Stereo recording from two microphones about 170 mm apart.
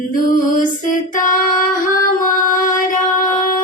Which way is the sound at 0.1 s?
50° left (ahead or behind).